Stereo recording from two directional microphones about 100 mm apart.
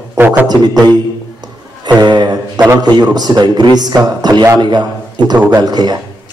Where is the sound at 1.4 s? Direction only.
45° right (ahead or behind).